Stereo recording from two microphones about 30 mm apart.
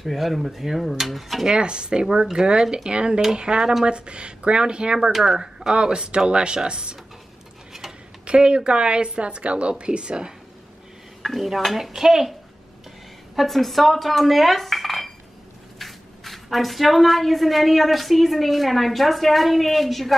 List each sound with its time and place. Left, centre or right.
0.0 s a woman's voice: centre
1.6 s a woman's voice: right
5.1 s dishes: centre
5.4 s speech: right
8.3 s a woman's voice: right
11.3 s dishes: centre
13.4 s a woman's voice: centre